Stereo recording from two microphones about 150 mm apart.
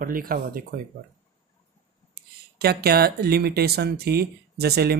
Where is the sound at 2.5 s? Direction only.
90° right.